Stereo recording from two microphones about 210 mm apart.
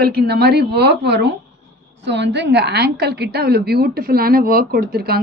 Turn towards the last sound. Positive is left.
turn(degrees=-50)  # may be behind; listen again after turning